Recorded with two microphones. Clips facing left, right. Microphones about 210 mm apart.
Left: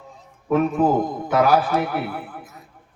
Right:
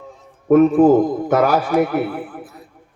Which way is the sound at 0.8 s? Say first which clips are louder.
Right 7 dB; 50° right (ahead or behind).